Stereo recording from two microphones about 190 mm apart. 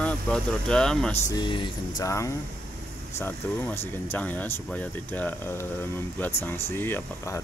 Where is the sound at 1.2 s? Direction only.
20° left (ahead or behind).